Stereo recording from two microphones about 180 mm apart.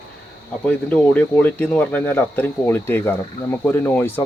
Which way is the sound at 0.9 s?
10° left (ahead or behind).